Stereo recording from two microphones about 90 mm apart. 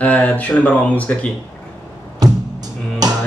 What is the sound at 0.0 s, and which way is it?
Speech, 15° left (ahead or behind).